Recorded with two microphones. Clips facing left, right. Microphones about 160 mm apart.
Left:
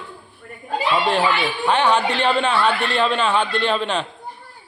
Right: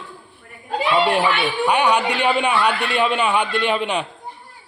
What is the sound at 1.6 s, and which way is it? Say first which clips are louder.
A man's voice: even; 15° right (ahead or behind).